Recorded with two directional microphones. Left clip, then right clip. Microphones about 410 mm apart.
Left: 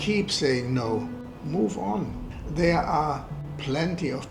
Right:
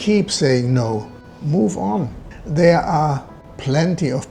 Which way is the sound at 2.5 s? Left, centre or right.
Right.